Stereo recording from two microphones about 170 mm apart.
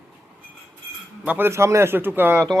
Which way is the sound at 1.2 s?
10° right (ahead or behind).